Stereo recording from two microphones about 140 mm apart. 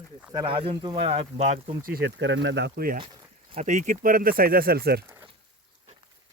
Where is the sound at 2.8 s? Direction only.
90° right.